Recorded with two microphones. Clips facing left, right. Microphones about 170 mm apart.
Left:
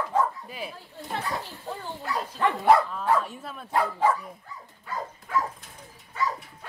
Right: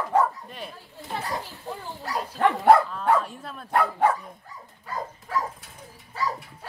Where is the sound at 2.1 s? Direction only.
40° right (ahead or behind).